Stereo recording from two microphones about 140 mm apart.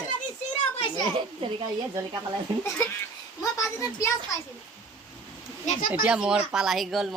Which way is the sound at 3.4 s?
25° left (ahead or behind).